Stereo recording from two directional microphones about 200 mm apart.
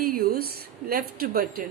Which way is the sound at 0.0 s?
45° right (ahead or behind).